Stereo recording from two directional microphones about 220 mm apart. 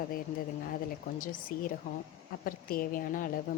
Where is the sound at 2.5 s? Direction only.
40° left (ahead or behind).